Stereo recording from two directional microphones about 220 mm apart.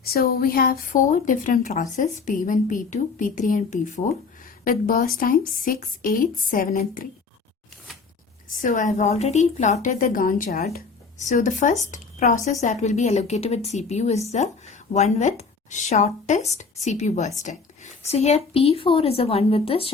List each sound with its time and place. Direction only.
0.0 s a woman's voice: 45° left (ahead or behind)
8.6 s a woman's voice: 35° left (ahead or behind)